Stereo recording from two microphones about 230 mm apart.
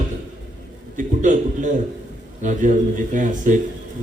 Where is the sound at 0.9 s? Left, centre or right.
Right.